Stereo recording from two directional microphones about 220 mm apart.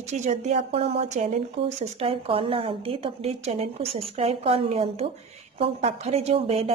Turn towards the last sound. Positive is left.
turn(degrees=-25)  # may be behind; listen again after turning